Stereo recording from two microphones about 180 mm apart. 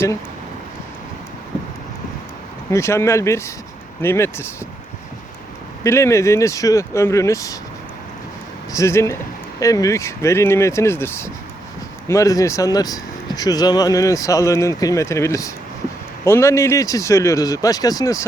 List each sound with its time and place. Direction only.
2.6 s speech: 15° left (ahead or behind)
5.8 s speech: 15° left (ahead or behind)
8.7 s speech: 15° left (ahead or behind)